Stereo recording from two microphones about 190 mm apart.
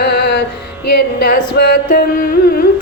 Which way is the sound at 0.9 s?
55° left (ahead or behind).